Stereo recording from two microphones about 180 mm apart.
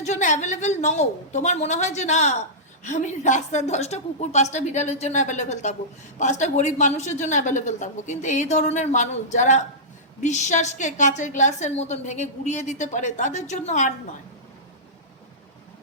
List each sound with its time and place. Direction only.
0.0 s a woman's voice: 40° left (ahead or behind)